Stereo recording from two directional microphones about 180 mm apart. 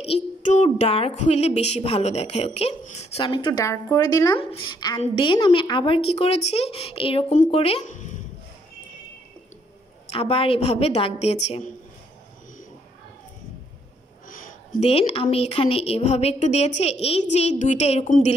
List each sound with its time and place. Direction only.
0.0 s speech: 40° left (ahead or behind); by 4.4 s 20° left (ahead or behind)
4.4 s a woman's voice: 30° left (ahead or behind)
10.0 s speech: 30° left (ahead or behind)
14.8 s speech: 35° left (ahead or behind)